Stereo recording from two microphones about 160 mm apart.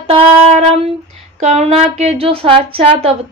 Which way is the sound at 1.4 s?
45° right (ahead or behind).